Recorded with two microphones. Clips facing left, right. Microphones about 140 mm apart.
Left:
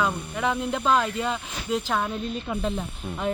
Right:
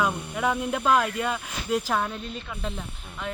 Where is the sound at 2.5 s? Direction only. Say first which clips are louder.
Left 6 dB; 35° left (ahead or behind).